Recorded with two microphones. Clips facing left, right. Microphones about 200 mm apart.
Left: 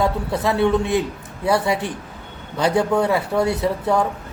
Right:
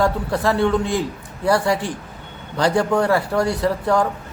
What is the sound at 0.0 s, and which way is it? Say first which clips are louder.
Speech: right 1 dB; 20° left (ahead or behind).